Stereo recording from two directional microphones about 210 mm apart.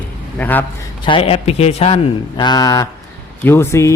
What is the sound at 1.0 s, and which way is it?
A man's voice, 25° left (ahead or behind).